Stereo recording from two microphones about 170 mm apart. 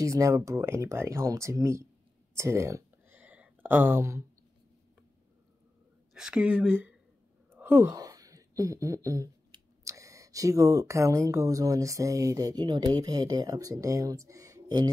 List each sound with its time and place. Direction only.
0.0 s speech: 20° right (ahead or behind)
2.3 s a sound: 15° right (ahead or behind)
6.1 s speech: 5° right (ahead or behind); by 14.9 s 20° right (ahead or behind)